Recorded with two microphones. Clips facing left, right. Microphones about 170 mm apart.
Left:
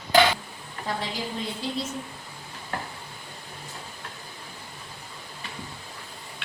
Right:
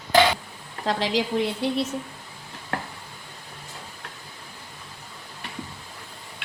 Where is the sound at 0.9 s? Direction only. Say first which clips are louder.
Right 7 dB; 85° right; by 1.9 s 70° right (ahead or behind).